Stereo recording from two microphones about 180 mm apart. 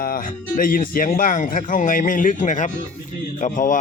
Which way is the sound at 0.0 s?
50° left (ahead or behind).